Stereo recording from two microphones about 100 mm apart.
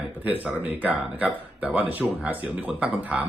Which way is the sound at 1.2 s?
15° right (ahead or behind).